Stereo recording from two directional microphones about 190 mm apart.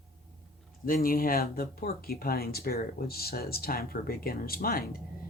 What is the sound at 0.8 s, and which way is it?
Speech, 50° left (ahead or behind).